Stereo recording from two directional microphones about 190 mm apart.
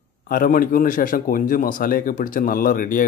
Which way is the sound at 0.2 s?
50° left (ahead or behind).